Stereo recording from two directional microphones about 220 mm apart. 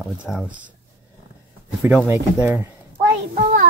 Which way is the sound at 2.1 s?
10° right (ahead or behind).